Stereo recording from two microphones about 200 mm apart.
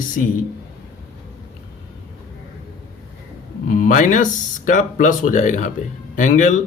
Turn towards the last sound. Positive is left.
turn(degrees=40)  # may be behind; listen again after turning